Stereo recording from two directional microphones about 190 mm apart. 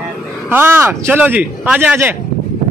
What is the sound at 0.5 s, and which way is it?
Speech, 10° right (ahead or behind).